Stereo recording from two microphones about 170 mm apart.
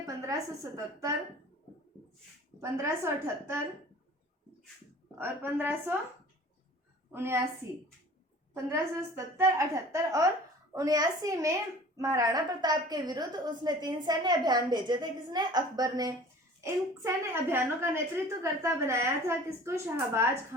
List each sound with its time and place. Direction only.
0.0 s a woman's voice: 20° right (ahead or behind)
2.6 s a woman's voice: 15° right (ahead or behind)
5.1 s a woman's voice: 10° right (ahead or behind)
7.1 s a woman's voice: 15° right (ahead or behind)
8.5 s a woman's voice: 15° right (ahead or behind)